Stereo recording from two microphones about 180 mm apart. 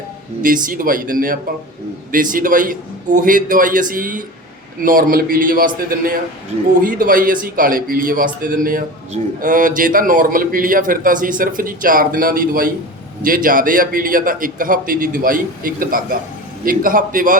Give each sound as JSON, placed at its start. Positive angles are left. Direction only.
{"t": 0.4, "sound": "a man's voice", "side_deg": -50}